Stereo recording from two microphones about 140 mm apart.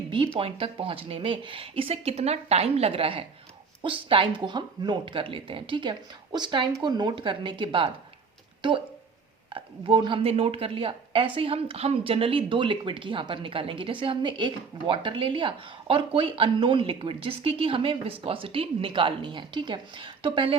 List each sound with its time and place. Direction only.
0.3 s a woman's voice: 40° right (ahead or behind)
9.5 s a woman's voice: 40° right (ahead or behind)